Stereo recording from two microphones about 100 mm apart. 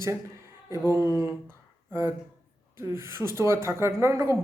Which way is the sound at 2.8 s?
25° right (ahead or behind).